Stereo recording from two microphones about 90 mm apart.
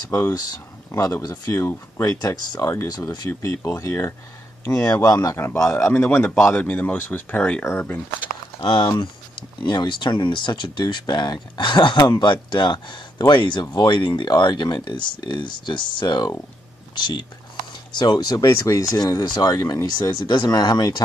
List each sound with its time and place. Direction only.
0.1 s speech: 40° left (ahead or behind)
3.3 s speech: 35° left (ahead or behind)
5.3 s a man's voice: 25° left (ahead or behind)
8.9 s speech: 60° left (ahead or behind)